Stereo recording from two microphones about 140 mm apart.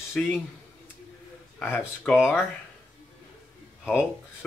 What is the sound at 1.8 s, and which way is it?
Speech, 5° right (ahead or behind).